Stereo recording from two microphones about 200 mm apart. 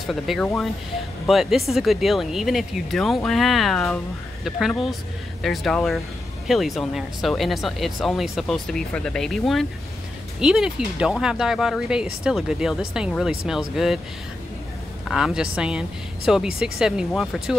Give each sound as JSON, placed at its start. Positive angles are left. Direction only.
{"t": 0.0, "sound": "speech", "side_deg": 0}
{"t": 15.0, "sound": "speech", "side_deg": 0}